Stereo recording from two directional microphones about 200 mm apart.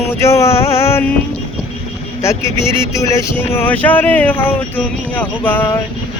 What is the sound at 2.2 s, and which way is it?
Speech, 15° left (ahead or behind).